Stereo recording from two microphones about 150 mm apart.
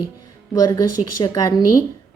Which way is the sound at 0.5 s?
25° left (ahead or behind).